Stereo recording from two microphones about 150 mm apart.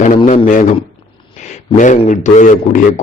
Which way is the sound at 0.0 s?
55° left (ahead or behind).